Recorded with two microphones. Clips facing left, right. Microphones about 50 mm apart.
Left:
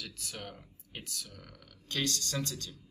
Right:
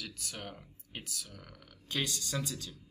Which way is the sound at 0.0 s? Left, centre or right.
Centre.